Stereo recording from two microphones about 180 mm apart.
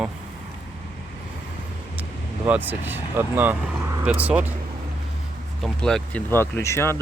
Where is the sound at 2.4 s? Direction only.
10° right (ahead or behind).